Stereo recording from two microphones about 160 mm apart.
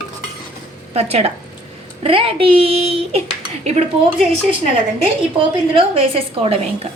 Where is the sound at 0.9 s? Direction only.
40° right (ahead or behind).